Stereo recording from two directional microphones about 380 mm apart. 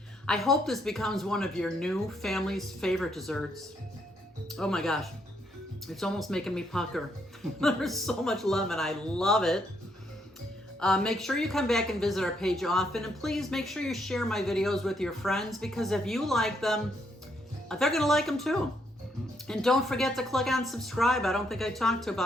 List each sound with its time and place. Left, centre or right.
0.3 s a woman's voice: centre
4.5 s a woman's voice: centre
10.8 s a woman's voice: centre